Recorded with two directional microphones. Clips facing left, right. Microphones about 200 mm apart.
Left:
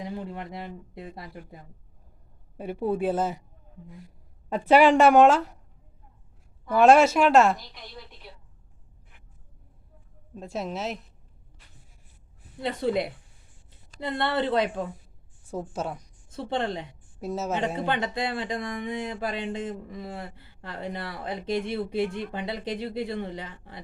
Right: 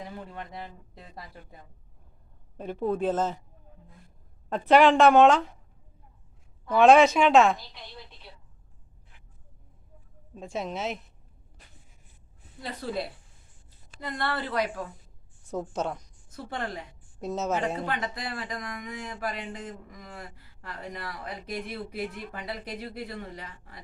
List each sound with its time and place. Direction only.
0.0 s speech: 25° left (ahead or behind)
2.6 s a woman's voice: 10° left (ahead or behind)
4.4 s a woman's voice: 10° left (ahead or behind)
6.7 s speech: 5° left (ahead or behind)
10.3 s speech: centre (ahead or behind)
12.6 s speech: 25° left (ahead or behind)
15.7 s speech: 5° left (ahead or behind)
16.3 s speech: 25° left (ahead or behind)
17.2 s speech: 5° left (ahead or behind)
17.8 s speech: 25° left (ahead or behind)